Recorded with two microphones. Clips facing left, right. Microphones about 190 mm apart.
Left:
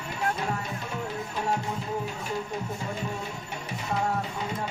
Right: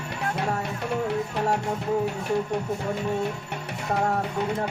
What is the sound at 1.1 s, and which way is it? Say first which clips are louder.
Music: right 5 dB; 65° right (ahead or behind).